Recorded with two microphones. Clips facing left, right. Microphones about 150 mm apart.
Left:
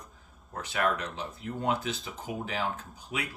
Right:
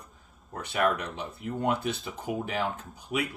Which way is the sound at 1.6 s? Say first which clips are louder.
Right 2 dB; 60° right (ahead or behind).